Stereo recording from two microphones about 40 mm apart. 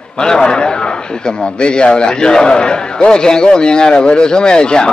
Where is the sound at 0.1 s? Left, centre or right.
Centre.